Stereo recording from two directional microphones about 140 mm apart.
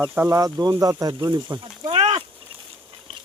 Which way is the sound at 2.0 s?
50° right (ahead or behind).